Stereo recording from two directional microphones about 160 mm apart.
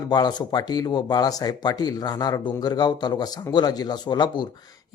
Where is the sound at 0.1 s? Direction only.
25° left (ahead or behind).